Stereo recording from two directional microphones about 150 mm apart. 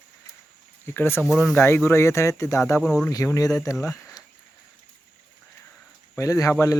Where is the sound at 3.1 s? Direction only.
25° left (ahead or behind).